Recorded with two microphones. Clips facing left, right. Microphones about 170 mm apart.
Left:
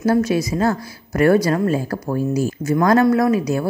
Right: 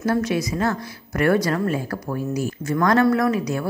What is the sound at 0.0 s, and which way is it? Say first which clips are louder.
A woman's voice: left 4 dB; 30° left (ahead or behind).